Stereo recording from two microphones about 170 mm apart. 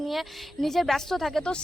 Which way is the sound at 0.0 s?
Centre (ahead or behind).